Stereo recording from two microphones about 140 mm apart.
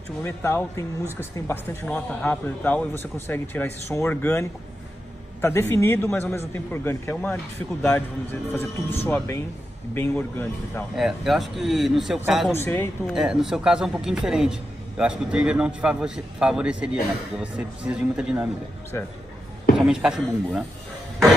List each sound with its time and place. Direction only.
0.2 s speech: 15° left (ahead or behind)
11.0 s a man's voice: centre (ahead or behind)
12.5 s speech: 15° left (ahead or behind)
13.0 s speech: 5° right (ahead or behind)
18.9 s speech: 20° left (ahead or behind)
19.8 s speech: 5° right (ahead or behind)